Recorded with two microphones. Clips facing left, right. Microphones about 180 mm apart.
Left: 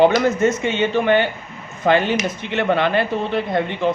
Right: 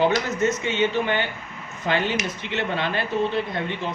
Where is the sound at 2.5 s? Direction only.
65° left (ahead or behind).